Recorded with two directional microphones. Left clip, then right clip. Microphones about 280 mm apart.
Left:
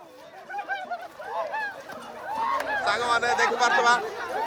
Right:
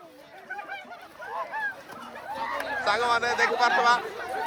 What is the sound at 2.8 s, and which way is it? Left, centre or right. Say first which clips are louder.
Speech: right 1 dB; centre.